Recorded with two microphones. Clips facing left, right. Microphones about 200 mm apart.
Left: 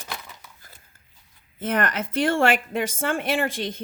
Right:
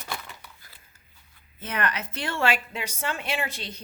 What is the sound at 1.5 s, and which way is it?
A woman's voice, 50° left (ahead or behind).